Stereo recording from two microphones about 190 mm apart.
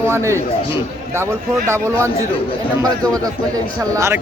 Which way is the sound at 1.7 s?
15° right (ahead or behind).